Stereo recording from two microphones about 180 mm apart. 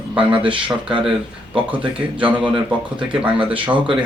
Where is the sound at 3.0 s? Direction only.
30° right (ahead or behind).